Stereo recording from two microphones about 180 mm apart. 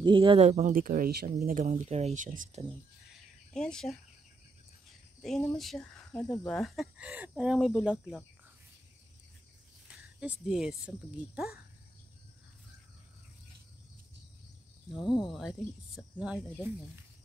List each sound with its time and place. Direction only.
0.0 s speech: 25° right (ahead or behind); by 2.6 s 45° right (ahead or behind)
3.5 s speech: 5° left (ahead or behind)
5.2 s speech: 5° left (ahead or behind)
9.8 s speech: 5° right (ahead or behind)
15.0 s speech: 25° left (ahead or behind)
15.3 s speech: centre (ahead or behind)